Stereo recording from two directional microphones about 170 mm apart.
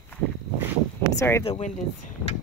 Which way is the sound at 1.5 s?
45° left (ahead or behind).